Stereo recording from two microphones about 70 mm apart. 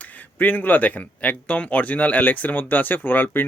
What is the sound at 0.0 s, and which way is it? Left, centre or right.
Speech, left.